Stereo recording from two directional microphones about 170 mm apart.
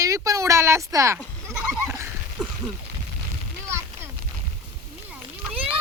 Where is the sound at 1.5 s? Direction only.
5° right (ahead or behind).